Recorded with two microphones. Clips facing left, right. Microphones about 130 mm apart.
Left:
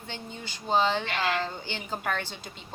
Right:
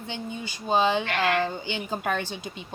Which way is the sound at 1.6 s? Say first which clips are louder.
Right 4 dB; 15° right (ahead or behind).